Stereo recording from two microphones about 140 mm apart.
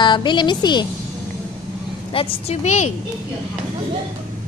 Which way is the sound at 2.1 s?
40° left (ahead or behind).